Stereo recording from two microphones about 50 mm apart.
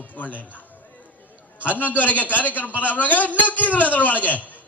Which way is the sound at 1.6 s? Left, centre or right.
Left.